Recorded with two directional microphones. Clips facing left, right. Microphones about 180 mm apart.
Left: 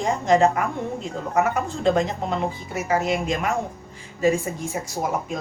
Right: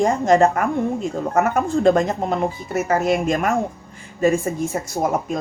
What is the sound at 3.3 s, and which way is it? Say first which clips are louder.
Speech: right 4 dB; 50° right (ahead or behind).